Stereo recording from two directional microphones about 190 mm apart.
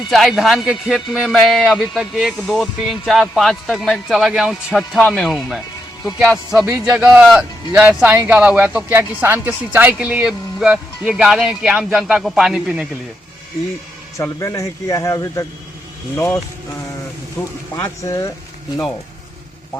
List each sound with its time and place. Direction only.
0.1 s a man's voice: centre (ahead or behind)
14.2 s speech: 15° left (ahead or behind)